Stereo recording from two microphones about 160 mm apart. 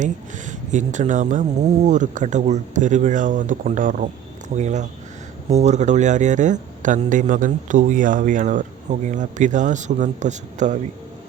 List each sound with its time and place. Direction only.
0.0 s a man's voice: 50° right (ahead or behind)